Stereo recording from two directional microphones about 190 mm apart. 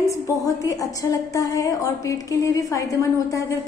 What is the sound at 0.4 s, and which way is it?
A woman's voice, 15° left (ahead or behind).